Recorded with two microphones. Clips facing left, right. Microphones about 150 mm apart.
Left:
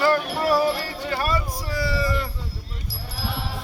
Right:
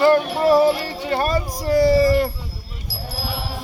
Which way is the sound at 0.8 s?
30° right (ahead or behind).